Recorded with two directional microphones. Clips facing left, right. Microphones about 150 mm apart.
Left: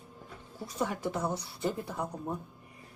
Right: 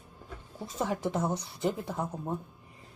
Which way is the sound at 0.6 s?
20° right (ahead or behind).